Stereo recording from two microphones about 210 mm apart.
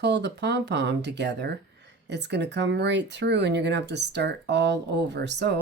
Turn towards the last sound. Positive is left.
turn(degrees=-55)  # may be behind; listen again after turning